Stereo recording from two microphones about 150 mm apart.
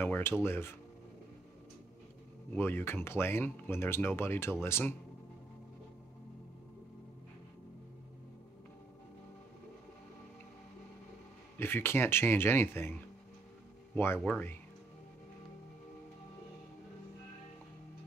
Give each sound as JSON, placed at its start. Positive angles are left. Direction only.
{"t": 0.0, "sound": "speech", "side_deg": 15}
{"t": 2.5, "sound": "speech", "side_deg": 15}
{"t": 11.5, "sound": "speech", "side_deg": 15}
{"t": 13.9, "sound": "speech", "side_deg": 15}